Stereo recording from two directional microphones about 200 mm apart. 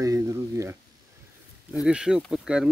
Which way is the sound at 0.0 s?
15° right (ahead or behind).